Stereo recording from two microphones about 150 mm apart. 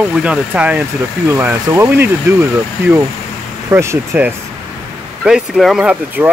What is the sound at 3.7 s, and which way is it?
Speech, 15° right (ahead or behind).